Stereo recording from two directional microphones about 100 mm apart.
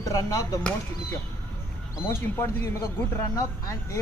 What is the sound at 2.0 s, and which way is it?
Speech, 25° left (ahead or behind).